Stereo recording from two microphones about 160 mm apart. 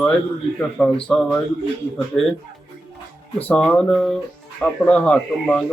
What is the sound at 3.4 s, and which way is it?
Speech, 5° left (ahead or behind).